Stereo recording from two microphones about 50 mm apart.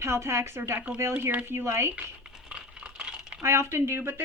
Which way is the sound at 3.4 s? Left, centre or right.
Right.